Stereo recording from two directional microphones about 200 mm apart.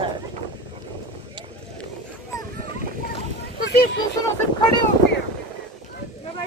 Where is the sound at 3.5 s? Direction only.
50° left (ahead or behind).